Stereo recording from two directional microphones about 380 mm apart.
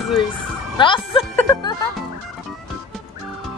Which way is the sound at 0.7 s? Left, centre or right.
Centre.